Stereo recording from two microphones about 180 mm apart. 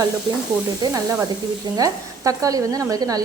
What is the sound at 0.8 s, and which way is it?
Speech, 20° right (ahead or behind).